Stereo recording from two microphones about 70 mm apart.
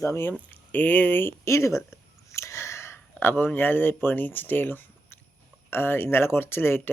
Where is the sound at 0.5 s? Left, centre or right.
Left.